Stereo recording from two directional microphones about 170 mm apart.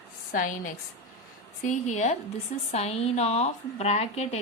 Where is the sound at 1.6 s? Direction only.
45° left (ahead or behind).